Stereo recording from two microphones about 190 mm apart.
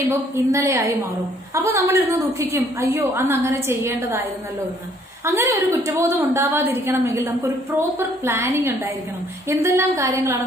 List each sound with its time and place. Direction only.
0.1 s a woman's voice: 15° right (ahead or behind)
5.2 s a woman's voice: 10° right (ahead or behind)